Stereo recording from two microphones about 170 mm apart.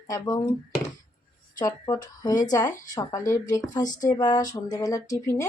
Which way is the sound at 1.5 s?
20° left (ahead or behind).